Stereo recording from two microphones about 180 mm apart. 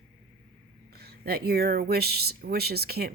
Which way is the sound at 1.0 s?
60° right (ahead or behind).